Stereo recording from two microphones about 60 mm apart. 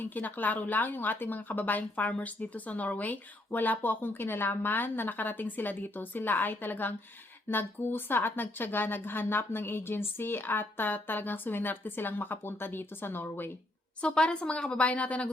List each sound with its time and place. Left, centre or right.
0.0 s speech: left
14.0 s a woman's voice: centre